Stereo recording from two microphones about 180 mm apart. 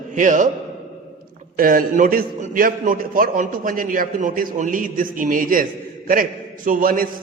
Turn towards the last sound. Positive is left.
turn(degrees=-50)  # may be behind; listen again after turning